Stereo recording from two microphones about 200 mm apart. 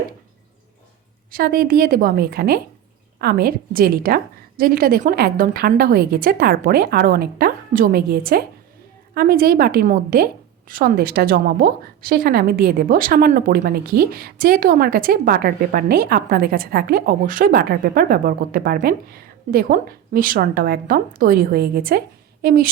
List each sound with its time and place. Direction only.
1.3 s a woman's voice: 50° right (ahead or behind)